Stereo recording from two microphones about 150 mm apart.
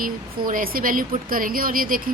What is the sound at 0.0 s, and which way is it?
A woman's voice, 70° right (ahead or behind).